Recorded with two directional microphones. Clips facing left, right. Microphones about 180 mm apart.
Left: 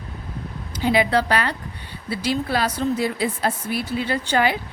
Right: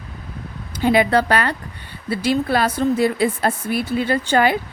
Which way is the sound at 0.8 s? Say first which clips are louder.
Right 3 dB; 50° right (ahead or behind).